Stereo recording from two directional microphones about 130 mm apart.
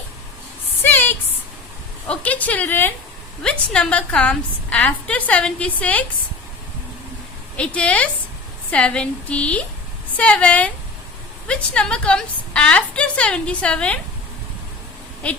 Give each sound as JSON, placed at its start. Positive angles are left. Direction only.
{"t": 0.9, "sound": "a sound", "side_deg": 15}
{"t": 2.0, "sound": "a woman's voice", "side_deg": 10}
{"t": 7.5, "sound": "a woman's voice", "side_deg": 10}